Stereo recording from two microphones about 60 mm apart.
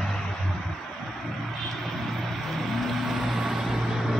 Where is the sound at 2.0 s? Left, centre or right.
Centre.